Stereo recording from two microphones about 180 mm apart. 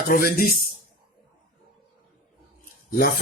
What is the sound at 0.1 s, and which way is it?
Speech, 50° left (ahead or behind).